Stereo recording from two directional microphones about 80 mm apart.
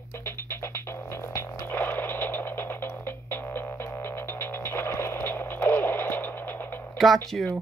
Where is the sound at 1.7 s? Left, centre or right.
Left.